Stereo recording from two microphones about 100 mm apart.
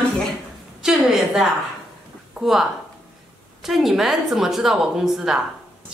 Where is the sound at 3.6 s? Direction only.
Centre (ahead or behind).